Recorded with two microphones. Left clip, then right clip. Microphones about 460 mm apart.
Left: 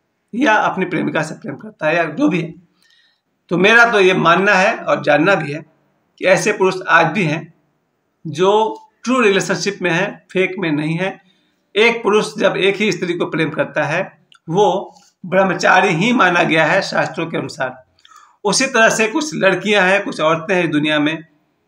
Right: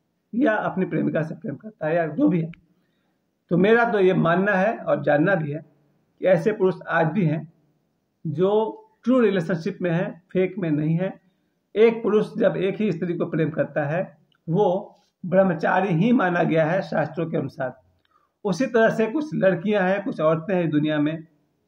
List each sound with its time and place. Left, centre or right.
0.3 s speech: right
3.4 s speech: right